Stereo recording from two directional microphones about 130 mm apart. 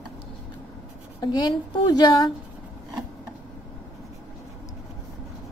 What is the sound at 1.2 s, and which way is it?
A woman's voice, 30° left (ahead or behind).